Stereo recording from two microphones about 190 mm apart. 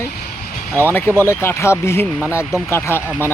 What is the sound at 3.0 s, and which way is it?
Speech, 10° right (ahead or behind).